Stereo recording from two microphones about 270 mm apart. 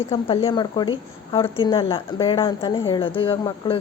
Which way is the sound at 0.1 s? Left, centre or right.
Centre.